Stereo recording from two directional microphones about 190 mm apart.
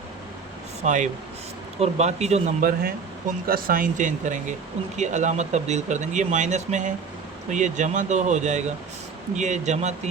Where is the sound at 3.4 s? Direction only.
50° right (ahead or behind).